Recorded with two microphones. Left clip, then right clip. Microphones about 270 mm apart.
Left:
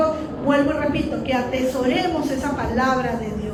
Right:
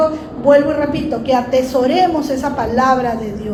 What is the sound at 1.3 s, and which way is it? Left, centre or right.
A woman's voice, centre.